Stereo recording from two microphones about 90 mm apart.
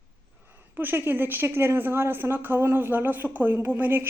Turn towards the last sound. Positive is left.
turn(degrees=-20)  # may be behind; listen again after turning